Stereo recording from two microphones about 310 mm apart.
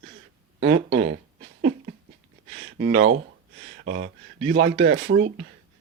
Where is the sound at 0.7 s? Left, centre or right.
Right.